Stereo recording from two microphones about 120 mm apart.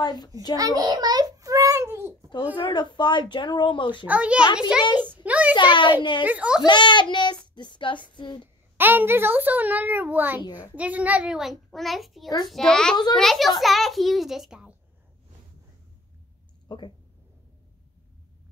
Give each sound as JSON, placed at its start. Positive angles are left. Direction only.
{"t": 0.0, "sound": "a woman's voice", "side_deg": 35}
{"t": 0.6, "sound": "a sound", "side_deg": -30}
{"t": 2.5, "sound": "a woman's voice", "side_deg": 40}
{"t": 4.0, "sound": "a child's voice", "side_deg": -10}
{"t": 5.1, "sound": "a sound", "side_deg": -10}
{"t": 5.5, "sound": "a woman's voice", "side_deg": 40}
{"t": 6.2, "sound": "a child's voice", "side_deg": -10}
{"t": 6.6, "sound": "a woman's voice", "side_deg": 40}
{"t": 8.7, "sound": "a child's voice", "side_deg": -15}
{"t": 16.6, "sound": "speech", "side_deg": 40}